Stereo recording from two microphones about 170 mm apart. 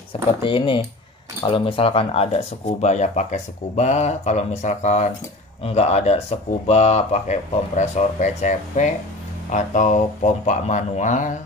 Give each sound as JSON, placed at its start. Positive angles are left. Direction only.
{"t": 0.4, "sound": "speech", "side_deg": 30}
{"t": 2.8, "sound": "speech", "side_deg": 45}